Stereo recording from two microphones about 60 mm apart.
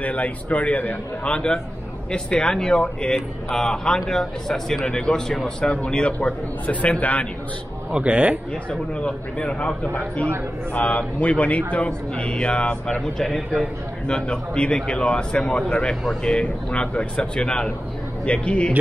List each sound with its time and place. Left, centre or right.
0.0 s speech: left
6.2 s speech: left
7.9 s a man's voice: centre
8.6 s speech: centre